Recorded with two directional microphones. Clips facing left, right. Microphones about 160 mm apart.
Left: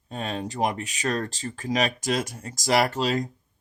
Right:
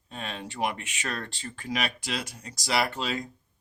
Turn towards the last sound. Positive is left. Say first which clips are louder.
# left 6 dB
turn(degrees=40)  # may be behind; listen again after turning